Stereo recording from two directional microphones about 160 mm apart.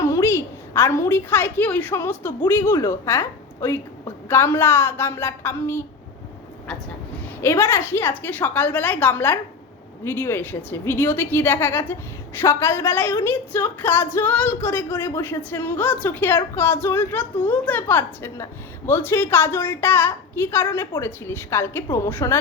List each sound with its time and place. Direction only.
0.0 s a woman's voice: 15° left (ahead or behind)
7.4 s a woman's voice: 15° left (ahead or behind)